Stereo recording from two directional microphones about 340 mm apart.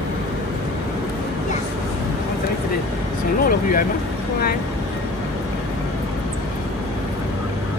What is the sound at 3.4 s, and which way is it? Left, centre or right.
Speech, left.